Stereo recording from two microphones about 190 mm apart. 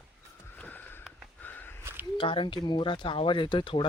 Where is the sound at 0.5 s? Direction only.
10° left (ahead or behind).